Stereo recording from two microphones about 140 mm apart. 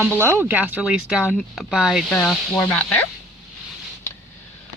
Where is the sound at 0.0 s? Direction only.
15° right (ahead or behind); by 3.1 s 10° left (ahead or behind).